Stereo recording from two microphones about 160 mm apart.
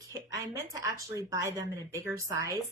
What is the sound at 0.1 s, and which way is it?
Speech, 20° right (ahead or behind).